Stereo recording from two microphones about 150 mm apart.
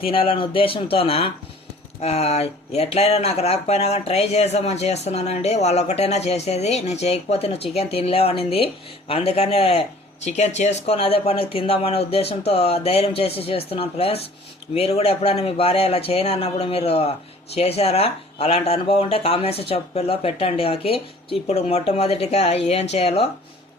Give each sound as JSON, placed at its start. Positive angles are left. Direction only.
{"t": 0.0, "sound": "speech", "side_deg": 35}